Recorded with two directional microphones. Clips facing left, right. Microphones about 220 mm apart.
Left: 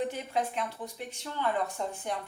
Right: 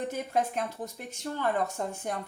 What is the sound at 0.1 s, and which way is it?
Speech, 45° right (ahead or behind).